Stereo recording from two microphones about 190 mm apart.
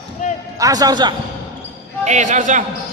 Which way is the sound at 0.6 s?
20° right (ahead or behind).